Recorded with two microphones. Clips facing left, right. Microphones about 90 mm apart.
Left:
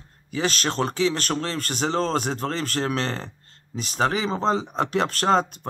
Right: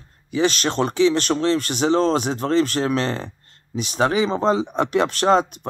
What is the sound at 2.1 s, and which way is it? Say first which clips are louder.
Speech: right 6 dB; 40° left (ahead or behind).